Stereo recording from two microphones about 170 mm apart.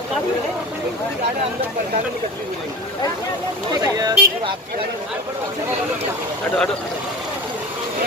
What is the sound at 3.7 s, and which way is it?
Speech, 20° right (ahead or behind).